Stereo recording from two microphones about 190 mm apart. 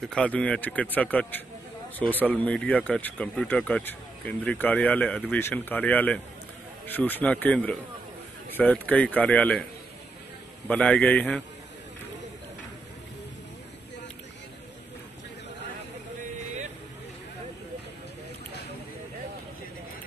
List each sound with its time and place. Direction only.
0.0 s speech: 5° left (ahead or behind)
10.7 s speech: 5° left (ahead or behind)